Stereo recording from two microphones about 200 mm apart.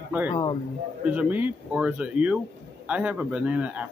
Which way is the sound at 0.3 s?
20° left (ahead or behind).